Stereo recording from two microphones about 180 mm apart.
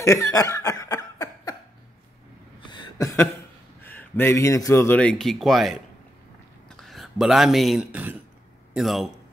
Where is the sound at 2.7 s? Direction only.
20° left (ahead or behind).